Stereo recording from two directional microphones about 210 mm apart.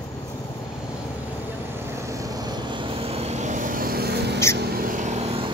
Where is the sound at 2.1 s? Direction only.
15° right (ahead or behind); by 4.4 s 55° right (ahead or behind).